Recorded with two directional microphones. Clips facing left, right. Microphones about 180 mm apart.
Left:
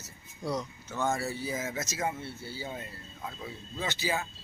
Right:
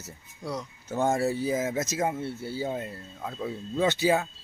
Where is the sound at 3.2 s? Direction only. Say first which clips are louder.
Right 8 dB; 60° right (ahead or behind).